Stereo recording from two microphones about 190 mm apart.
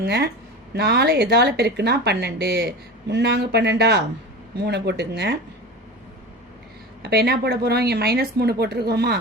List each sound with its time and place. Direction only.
0.0 s speech: 60° right (ahead or behind)
7.0 s speech: 55° right (ahead or behind)